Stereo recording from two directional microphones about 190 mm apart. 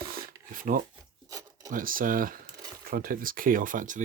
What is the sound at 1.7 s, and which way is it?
Speech, 45° right (ahead or behind).